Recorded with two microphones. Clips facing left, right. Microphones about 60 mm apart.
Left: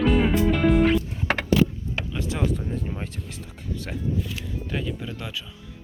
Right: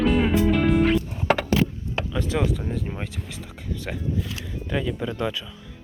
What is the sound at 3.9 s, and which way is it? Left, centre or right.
Speech, right.